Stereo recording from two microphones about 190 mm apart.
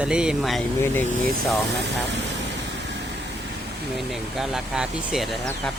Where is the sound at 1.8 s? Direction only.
65° right (ahead or behind).